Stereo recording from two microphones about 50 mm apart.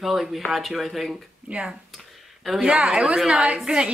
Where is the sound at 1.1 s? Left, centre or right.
Right.